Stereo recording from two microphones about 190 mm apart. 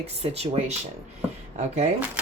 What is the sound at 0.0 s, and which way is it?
Speech, 35° right (ahead or behind).